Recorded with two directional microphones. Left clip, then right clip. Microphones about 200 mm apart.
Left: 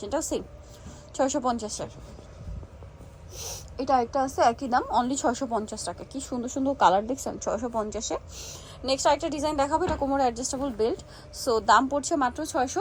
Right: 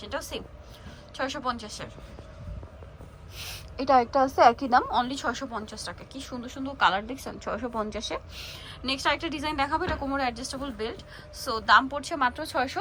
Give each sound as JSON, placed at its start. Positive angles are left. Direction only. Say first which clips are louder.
{"t": 0.0, "sound": "a woman's voice", "louder": "left 5 dB", "side_deg": 30}
{"t": 3.8, "sound": "a woman's voice", "louder": "right 3 dB", "side_deg": 15}